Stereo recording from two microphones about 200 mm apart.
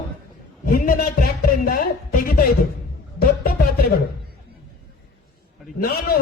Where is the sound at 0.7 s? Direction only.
45° left (ahead or behind).